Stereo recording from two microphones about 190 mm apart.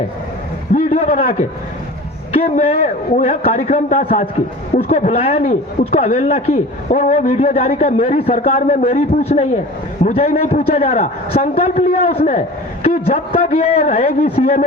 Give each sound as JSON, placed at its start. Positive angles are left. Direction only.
{"t": 0.7, "sound": "a sound", "side_deg": 35}
{"t": 2.3, "sound": "a man's voice", "side_deg": 30}
{"t": 10.6, "sound": "speech", "side_deg": 30}